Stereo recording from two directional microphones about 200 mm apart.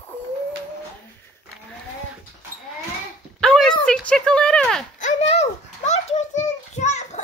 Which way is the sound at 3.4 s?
Centre (ahead or behind).